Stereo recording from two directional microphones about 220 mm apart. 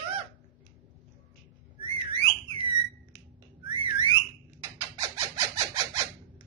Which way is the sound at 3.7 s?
20° right (ahead or behind).